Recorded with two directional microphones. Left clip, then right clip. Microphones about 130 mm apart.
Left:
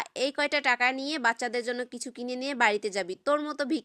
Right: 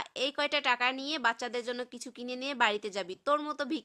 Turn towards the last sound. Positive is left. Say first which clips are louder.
# left 3 dB
turn(degrees=30)  # may be behind; listen again after turning